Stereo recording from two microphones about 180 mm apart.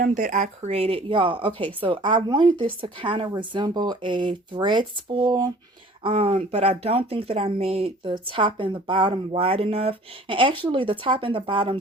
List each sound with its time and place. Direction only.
0.0 s a woman's voice: 45° right (ahead or behind); by 11.8 s 30° right (ahead or behind)